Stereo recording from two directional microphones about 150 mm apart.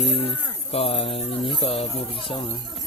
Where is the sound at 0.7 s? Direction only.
40° left (ahead or behind).